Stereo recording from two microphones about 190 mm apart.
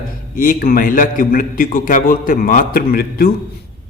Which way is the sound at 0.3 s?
50° left (ahead or behind).